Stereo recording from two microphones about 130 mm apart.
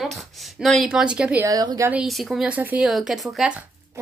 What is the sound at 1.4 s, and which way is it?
Speech, 30° right (ahead or behind).